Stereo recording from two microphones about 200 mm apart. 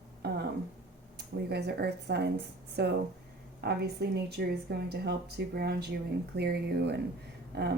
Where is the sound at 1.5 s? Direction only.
55° right (ahead or behind).